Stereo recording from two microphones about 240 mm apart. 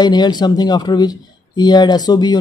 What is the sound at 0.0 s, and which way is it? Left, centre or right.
Speech, centre.